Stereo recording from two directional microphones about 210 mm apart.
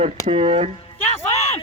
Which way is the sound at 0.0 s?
25° right (ahead or behind).